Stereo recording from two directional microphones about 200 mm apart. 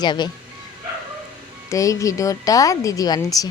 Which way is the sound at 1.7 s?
15° left (ahead or behind).